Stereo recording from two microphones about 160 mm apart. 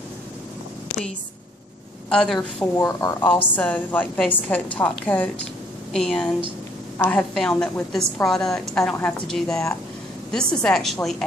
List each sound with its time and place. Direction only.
2.0 s a woman's voice: 5° left (ahead or behind)
2.6 s a woman's voice: 20° left (ahead or behind)
3.3 s a woman's voice: 10° left (ahead or behind)